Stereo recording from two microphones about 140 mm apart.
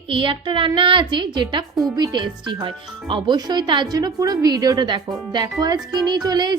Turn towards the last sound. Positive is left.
turn(degrees=-30)  # may be behind; listen again after turning